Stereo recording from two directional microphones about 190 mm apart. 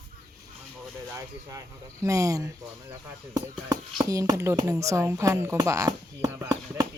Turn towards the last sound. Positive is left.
turn(degrees=-15)  # may be behind; listen again after turning